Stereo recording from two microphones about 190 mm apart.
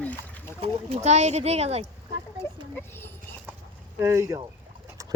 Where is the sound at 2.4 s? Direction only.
10° left (ahead or behind).